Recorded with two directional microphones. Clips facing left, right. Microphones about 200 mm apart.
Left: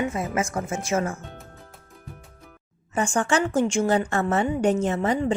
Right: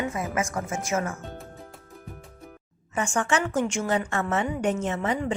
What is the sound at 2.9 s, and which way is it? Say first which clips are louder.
A woman's voice: left 3 dB; 35° left (ahead or behind).